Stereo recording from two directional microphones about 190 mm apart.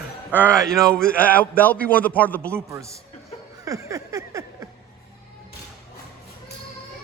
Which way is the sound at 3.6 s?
15° right (ahead or behind).